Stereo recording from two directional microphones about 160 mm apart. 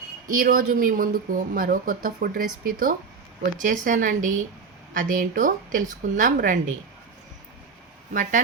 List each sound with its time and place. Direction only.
0.3 s speech: 60° right (ahead or behind)
8.1 s speech: 55° right (ahead or behind)